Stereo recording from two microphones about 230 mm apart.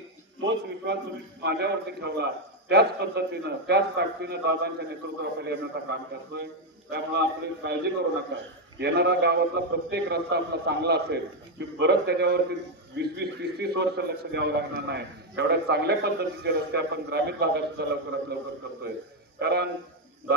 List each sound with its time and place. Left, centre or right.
0.4 s a man's voice: right
19.4 s a man's voice: right